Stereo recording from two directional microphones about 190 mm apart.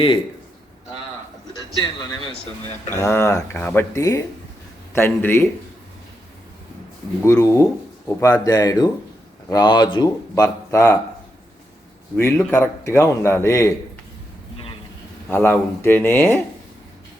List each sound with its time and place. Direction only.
3.0 s speech: 15° left (ahead or behind)
7.2 s speech: 15° left (ahead or behind)
12.1 s speech: 15° left (ahead or behind)
15.3 s speech: 10° left (ahead or behind)